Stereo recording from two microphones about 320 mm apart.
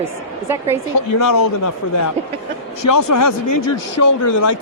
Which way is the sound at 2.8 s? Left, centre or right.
Left.